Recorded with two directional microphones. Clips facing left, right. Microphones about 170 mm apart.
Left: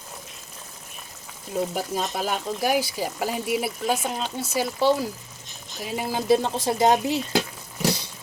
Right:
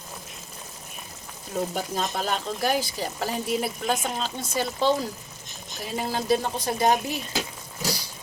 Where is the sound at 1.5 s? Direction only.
5° left (ahead or behind).